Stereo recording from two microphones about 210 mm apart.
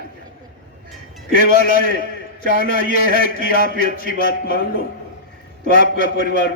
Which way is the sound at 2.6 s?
45° left (ahead or behind).